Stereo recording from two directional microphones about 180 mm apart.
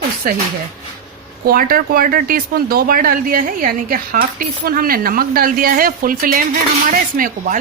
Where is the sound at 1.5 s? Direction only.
55° right (ahead or behind).